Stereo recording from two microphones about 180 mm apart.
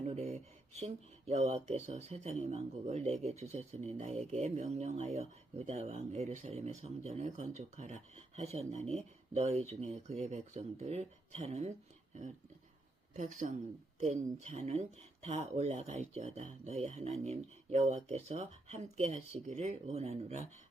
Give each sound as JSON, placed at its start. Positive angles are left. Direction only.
{"t": 0.0, "sound": "speech", "side_deg": -40}